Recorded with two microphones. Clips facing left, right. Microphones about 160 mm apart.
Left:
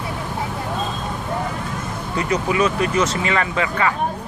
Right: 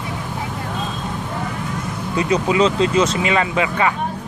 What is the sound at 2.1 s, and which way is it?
Speech, 20° right (ahead or behind).